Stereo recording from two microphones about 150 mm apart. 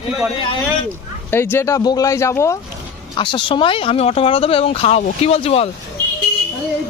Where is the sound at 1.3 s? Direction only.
15° left (ahead or behind).